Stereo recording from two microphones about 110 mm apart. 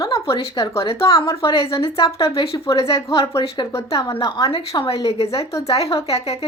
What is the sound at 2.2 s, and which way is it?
Speech, 60° left (ahead or behind).